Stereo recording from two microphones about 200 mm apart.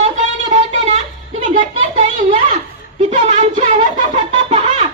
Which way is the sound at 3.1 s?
35° right (ahead or behind).